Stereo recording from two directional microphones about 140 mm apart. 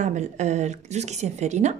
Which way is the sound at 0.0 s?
55° right (ahead or behind).